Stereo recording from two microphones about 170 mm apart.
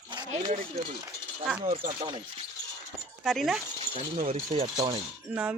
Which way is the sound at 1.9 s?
25° right (ahead or behind).